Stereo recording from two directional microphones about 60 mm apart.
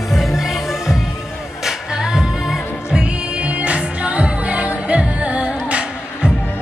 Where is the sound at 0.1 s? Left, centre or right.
Centre.